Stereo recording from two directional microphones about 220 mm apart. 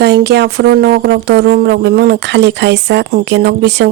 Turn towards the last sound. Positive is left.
turn(degrees=-50)  # may be behind; listen again after turning